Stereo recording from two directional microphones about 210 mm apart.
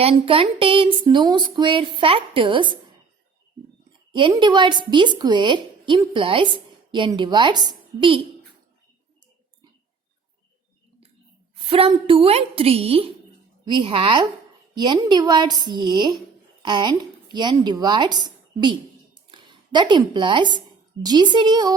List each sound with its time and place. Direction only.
0.0 s a woman's voice: 25° right (ahead or behind)
4.1 s a woman's voice: 20° right (ahead or behind)
11.7 s a woman's voice: 25° right (ahead or behind)